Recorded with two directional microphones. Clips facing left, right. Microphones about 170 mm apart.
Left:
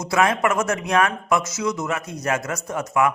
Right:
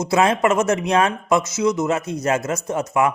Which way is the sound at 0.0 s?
25° right (ahead or behind).